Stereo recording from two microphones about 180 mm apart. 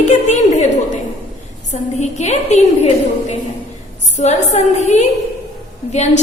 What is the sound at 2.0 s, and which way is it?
A woman's voice, 40° left (ahead or behind).